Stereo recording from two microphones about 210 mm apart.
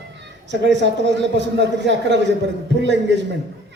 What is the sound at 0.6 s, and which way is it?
A man's voice, 55° right (ahead or behind).